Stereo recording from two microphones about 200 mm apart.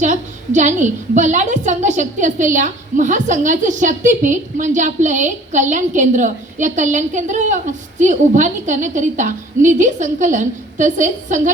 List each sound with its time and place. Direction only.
0.0 s a woman's voice: 35° right (ahead or behind)